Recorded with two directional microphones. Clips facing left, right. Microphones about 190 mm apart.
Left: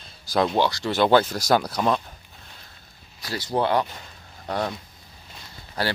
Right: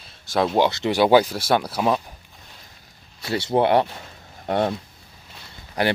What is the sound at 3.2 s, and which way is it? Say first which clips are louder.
Speech: right 5 dB; 25° right (ahead or behind).